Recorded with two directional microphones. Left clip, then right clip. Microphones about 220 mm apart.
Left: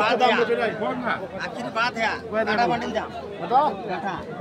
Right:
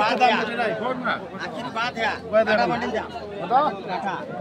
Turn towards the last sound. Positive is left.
turn(degrees=-20)  # may be behind; listen again after turning